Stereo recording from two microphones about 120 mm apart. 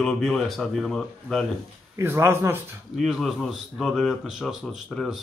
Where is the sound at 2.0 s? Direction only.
20° right (ahead or behind).